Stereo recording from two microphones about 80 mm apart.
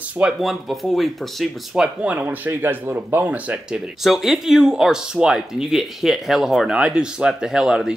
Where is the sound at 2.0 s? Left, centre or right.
Right.